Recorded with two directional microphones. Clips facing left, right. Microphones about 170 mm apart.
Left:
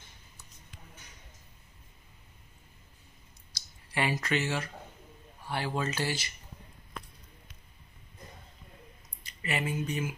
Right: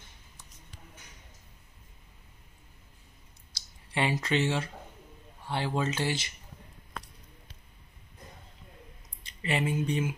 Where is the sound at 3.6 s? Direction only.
25° right (ahead or behind).